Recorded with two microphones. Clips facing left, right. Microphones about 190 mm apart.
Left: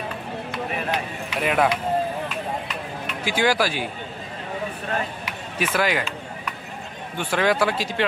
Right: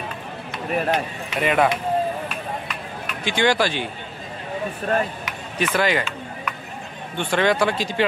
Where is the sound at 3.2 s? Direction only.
5° left (ahead or behind).